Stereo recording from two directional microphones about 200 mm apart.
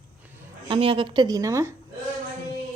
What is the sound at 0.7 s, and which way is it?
Speech, 25° right (ahead or behind).